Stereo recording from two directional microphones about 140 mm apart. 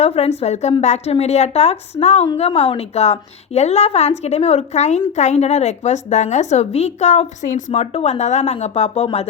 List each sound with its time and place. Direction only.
0.0 s a woman's voice: 50° left (ahead or behind)